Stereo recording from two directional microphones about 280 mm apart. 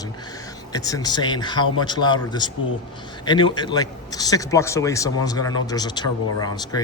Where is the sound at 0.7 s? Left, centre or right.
Centre.